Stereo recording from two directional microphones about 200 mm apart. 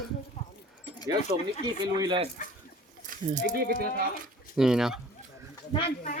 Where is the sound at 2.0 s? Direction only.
25° right (ahead or behind).